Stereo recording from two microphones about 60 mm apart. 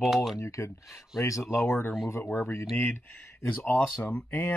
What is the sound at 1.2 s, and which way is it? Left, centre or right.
Speech, left.